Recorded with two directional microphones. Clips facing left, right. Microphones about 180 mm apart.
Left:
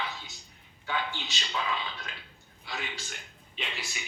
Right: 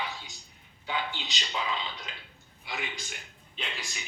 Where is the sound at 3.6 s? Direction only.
Centre (ahead or behind).